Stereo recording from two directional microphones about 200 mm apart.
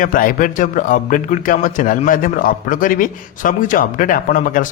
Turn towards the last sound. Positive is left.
turn(degrees=40)  # may be behind; listen again after turning